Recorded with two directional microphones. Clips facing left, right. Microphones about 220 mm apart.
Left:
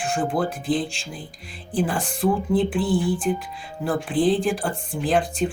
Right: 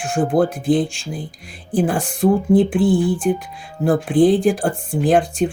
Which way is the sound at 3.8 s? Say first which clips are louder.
Right 7 dB; 45° right (ahead or behind).